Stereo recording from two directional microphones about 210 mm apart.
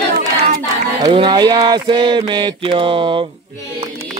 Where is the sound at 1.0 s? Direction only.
20° right (ahead or behind).